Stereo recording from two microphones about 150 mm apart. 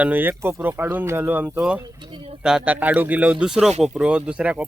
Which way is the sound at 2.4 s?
5° right (ahead or behind).